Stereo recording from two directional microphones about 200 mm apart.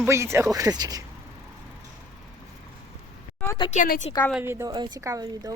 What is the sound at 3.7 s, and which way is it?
Speech, 40° left (ahead or behind).